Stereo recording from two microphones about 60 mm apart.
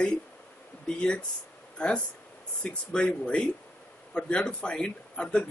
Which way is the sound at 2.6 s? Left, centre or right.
Centre.